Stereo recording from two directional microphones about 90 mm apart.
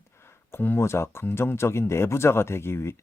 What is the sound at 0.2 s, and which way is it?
Speech, 30° left (ahead or behind).